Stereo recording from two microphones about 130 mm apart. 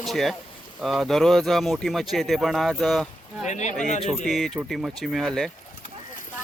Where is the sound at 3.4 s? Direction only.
65° left (ahead or behind).